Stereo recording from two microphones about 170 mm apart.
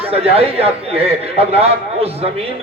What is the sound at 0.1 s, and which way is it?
Speech, 35° right (ahead or behind).